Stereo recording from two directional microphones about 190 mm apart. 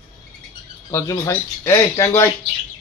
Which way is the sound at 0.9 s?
15° left (ahead or behind).